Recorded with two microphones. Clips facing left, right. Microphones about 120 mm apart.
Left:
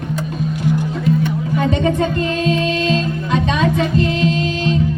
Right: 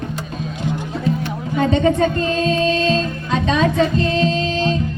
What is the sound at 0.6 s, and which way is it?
Music, 20° right (ahead or behind).